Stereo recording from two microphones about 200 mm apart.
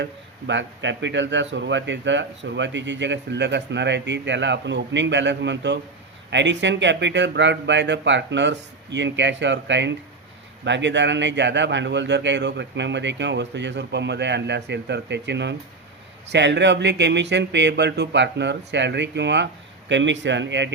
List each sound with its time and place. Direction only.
0.0 s speech: 65° right (ahead or behind)